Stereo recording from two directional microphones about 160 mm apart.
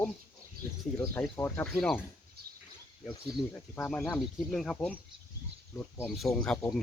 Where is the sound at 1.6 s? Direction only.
Centre (ahead or behind).